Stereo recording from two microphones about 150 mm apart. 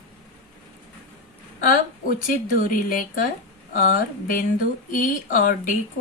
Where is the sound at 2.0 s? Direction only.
65° left (ahead or behind).